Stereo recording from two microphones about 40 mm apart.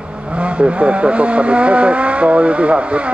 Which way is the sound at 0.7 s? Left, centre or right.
Right.